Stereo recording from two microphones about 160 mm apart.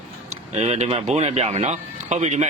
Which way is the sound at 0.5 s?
40° right (ahead or behind).